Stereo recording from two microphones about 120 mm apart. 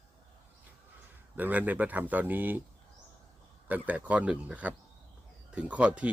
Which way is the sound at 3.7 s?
10° right (ahead or behind).